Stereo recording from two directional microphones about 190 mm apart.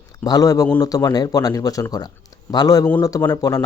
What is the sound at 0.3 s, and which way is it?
A man's voice, 20° left (ahead or behind).